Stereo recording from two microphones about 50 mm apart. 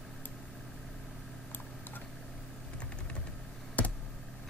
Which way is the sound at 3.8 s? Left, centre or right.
Left.